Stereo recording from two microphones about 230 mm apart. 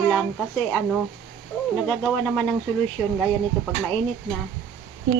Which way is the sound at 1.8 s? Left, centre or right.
Centre.